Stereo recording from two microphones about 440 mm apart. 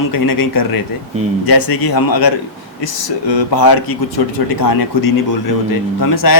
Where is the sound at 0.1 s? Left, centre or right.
Left.